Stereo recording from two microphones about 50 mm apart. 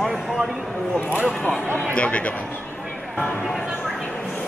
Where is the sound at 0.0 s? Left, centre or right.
Centre.